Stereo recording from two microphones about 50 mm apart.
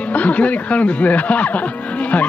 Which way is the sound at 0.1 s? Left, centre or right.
Left.